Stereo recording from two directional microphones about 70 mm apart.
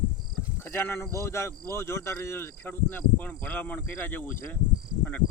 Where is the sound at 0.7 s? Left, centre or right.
Left.